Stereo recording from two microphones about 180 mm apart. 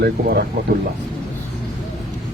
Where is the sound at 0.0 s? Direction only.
60° right (ahead or behind).